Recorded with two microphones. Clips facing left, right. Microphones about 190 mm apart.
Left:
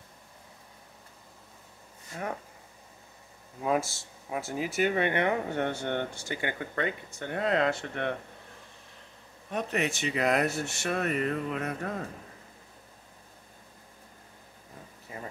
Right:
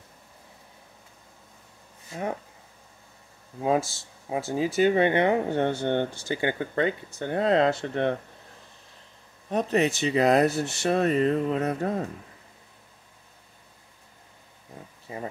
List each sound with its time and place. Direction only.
3.6 s speech: 25° right (ahead or behind)
9.5 s speech: 35° right (ahead or behind)